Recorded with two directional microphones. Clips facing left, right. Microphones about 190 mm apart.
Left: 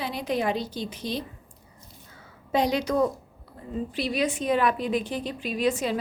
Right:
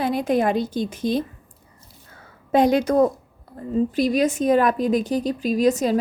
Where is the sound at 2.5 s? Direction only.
50° right (ahead or behind).